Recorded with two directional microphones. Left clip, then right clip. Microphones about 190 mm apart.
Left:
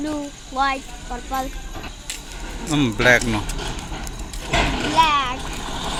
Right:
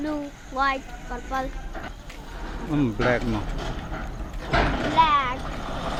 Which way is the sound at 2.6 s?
5° left (ahead or behind).